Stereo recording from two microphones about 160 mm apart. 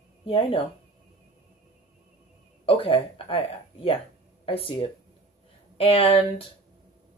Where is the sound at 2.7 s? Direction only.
35° left (ahead or behind).